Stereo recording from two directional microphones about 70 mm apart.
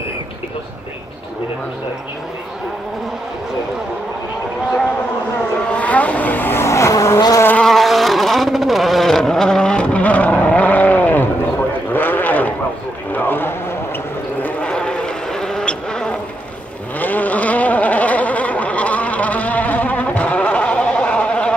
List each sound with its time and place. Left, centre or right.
5.7 s vehicle: centre; by 7.2 s left
7.6 s vehicle: centre; by 12.5 s left
13.1 s a sound: left
14.6 s vehicle: centre
17.0 s vehicle: left